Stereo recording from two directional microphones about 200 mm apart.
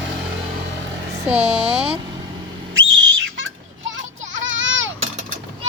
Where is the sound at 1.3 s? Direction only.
30° right (ahead or behind).